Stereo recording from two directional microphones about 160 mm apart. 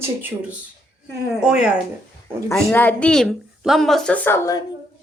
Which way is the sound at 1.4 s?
5° right (ahead or behind).